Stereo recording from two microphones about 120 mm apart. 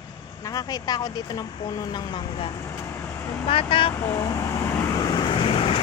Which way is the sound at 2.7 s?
20° left (ahead or behind).